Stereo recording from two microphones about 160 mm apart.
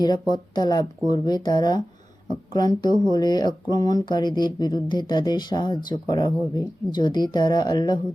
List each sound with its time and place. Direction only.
0.0 s speech: 25° left (ahead or behind)